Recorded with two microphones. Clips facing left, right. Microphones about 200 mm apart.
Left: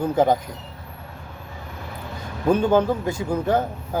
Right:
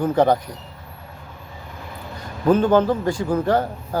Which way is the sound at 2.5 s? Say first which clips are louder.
Right 2 dB; 10° left (ahead or behind).